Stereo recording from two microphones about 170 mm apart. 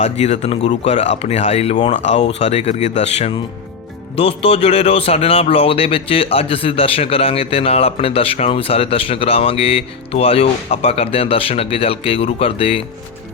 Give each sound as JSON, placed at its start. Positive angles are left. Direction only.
{"t": 0.0, "sound": "speech", "side_deg": 40}